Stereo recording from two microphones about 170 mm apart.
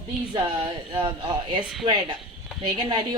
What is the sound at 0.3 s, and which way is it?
Speech, 30° right (ahead or behind).